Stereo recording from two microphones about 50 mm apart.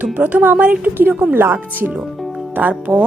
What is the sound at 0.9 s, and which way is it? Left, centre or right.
Speech, right.